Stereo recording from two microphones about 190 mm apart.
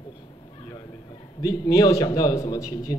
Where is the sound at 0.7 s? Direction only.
20° left (ahead or behind).